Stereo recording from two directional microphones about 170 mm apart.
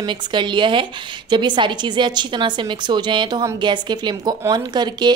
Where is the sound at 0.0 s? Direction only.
30° right (ahead or behind).